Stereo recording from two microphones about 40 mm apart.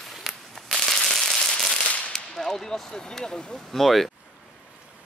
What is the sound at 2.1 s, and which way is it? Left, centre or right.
Speech, centre.